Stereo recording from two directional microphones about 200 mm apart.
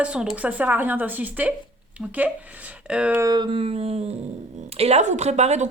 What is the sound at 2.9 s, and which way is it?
Speech, 5° right (ahead or behind).